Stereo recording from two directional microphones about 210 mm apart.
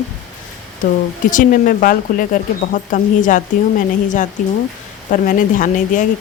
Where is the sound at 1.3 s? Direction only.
40° left (ahead or behind).